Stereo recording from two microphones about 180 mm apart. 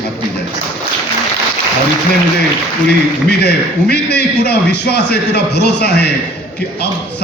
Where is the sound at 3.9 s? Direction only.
65° left (ahead or behind).